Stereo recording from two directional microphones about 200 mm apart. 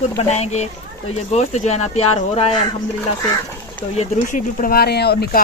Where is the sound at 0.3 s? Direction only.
35° left (ahead or behind).